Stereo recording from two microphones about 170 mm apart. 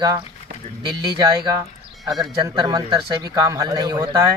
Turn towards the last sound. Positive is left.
turn(degrees=-20)  # may be behind; listen again after turning